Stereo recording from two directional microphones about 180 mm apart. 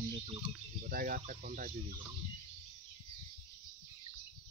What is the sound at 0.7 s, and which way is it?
Speech, 50° right (ahead or behind).